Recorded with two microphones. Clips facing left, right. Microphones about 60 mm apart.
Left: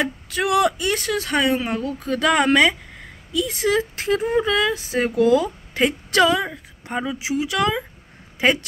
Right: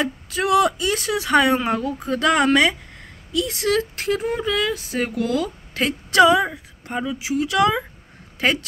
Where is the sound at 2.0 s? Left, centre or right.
Centre.